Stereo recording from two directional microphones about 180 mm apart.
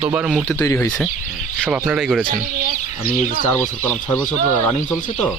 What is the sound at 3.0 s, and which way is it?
Speech, 50° left (ahead or behind).